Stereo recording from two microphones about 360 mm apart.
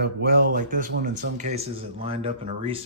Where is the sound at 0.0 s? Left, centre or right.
Right.